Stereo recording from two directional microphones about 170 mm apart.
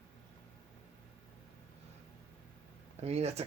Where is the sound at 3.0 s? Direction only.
40° right (ahead or behind).